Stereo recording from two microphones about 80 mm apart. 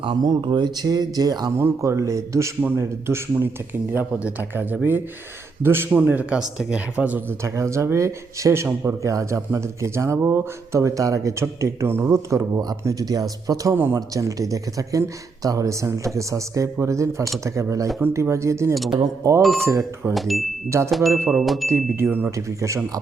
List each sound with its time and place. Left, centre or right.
0.0 s speech: right
1.5 s speech: right
2.6 s speech: right
5.9 s speech: centre
7.3 s speech: right
12.8 s speech: right
19.4 s speech: centre
19.6 s speech: right
20.1 s speech: centre
20.7 s speech: right
21.4 s speech: centre
21.7 s speech: right
22.4 s speech: right